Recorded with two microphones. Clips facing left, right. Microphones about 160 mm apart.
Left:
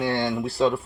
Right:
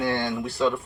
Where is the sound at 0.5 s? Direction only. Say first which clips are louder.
Left 2 dB; 40° left (ahead or behind).